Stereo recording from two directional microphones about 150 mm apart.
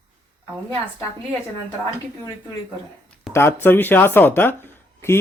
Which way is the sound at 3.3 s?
15° left (ahead or behind).